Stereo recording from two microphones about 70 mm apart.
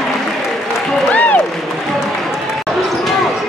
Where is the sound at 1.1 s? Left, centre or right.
Left.